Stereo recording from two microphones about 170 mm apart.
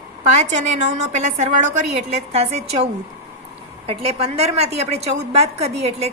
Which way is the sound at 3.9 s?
35° right (ahead or behind).